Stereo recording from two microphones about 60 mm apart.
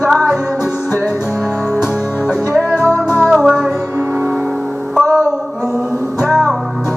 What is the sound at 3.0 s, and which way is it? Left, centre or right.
Music, left.